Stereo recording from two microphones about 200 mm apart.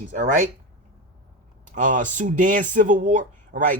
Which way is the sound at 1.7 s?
40° right (ahead or behind).